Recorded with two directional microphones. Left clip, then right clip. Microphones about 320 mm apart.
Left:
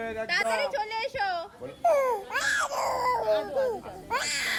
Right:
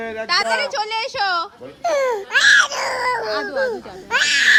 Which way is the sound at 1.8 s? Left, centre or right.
Right.